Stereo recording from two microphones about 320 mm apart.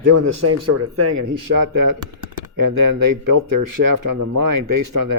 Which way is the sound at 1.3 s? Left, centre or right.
Right.